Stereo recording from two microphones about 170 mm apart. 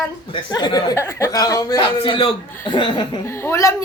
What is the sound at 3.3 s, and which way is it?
Speech, 15° left (ahead or behind).